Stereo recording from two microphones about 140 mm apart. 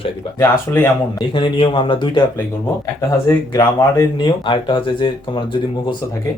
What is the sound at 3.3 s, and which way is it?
Speech, 25° left (ahead or behind).